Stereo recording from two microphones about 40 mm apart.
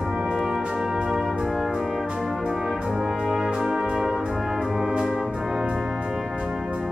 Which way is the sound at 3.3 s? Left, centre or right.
Centre.